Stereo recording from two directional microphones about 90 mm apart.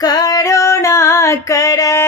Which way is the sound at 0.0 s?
45° left (ahead or behind).